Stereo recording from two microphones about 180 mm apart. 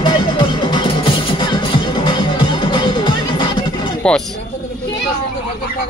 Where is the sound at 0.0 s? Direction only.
25° left (ahead or behind).